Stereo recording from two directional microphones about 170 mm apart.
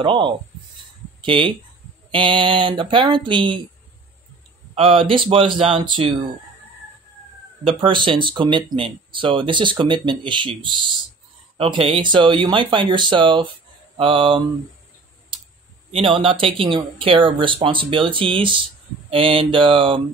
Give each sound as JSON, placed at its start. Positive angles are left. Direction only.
{"t": 0.0, "sound": "speech", "side_deg": -30}
{"t": 4.7, "sound": "speech", "side_deg": -35}
{"t": 7.6, "sound": "speech", "side_deg": -30}
{"t": 15.9, "sound": "speech", "side_deg": -30}